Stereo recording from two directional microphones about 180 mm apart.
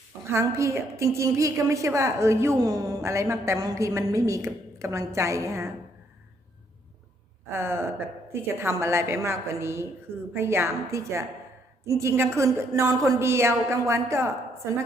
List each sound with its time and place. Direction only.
0.3 s a woman's voice: 15° right (ahead or behind)
7.5 s a woman's voice: 15° right (ahead or behind)